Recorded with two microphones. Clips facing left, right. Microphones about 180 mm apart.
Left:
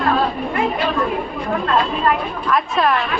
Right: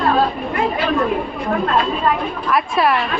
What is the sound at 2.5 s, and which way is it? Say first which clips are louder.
Speech: right 1 dB; 5° right (ahead or behind).